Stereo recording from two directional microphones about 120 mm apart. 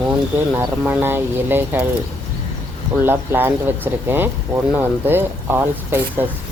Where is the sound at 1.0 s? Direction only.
20° right (ahead or behind).